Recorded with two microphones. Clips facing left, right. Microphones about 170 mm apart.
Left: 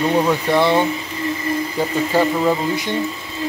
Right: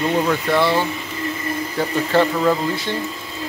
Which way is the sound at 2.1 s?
15° left (ahead or behind).